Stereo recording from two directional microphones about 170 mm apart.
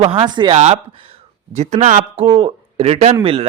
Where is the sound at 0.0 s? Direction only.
30° right (ahead or behind).